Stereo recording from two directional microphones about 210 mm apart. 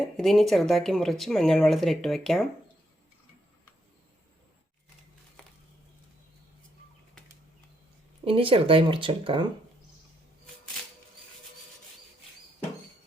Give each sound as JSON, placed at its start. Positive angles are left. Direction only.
{"t": 0.2, "sound": "speech", "side_deg": 0}
{"t": 8.2, "sound": "speech", "side_deg": -25}